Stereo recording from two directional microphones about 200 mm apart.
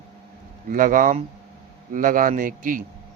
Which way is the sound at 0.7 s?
45° right (ahead or behind).